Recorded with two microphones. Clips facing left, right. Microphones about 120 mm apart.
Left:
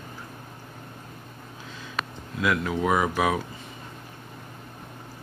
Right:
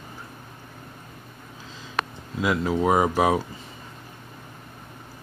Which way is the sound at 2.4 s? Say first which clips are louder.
Right 2 dB; 25° right (ahead or behind).